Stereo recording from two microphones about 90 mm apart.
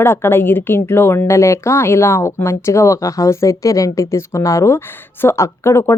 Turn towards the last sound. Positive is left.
turn(degrees=30)  # may be behind; listen again after turning